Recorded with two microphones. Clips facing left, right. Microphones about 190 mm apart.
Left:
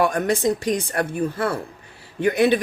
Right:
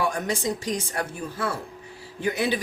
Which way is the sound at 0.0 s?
60° left (ahead or behind).